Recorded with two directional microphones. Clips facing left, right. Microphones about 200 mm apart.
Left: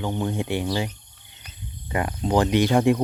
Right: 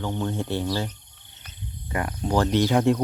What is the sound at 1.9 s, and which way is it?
Speech, 20° left (ahead or behind).